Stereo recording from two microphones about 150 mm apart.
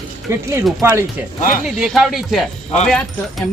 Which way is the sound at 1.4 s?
65° left (ahead or behind).